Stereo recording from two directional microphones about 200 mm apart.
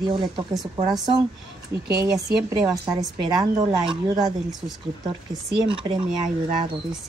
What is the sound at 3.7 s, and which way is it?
Speech, 20° right (ahead or behind).